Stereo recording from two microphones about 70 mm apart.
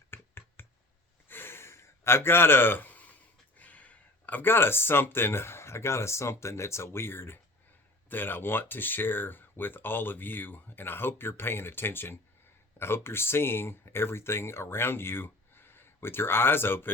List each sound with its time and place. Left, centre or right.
0.1 s finger snapping: left
1.3 s gasp: left
3.6 s speech: left